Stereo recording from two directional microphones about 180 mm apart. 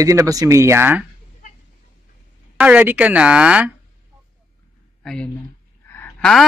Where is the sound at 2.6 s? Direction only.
10° right (ahead or behind).